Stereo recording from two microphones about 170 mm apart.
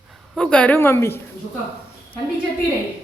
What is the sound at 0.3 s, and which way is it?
Speech, 5° left (ahead or behind).